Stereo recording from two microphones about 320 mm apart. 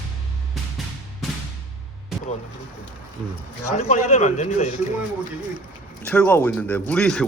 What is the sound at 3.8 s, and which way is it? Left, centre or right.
Speech, left.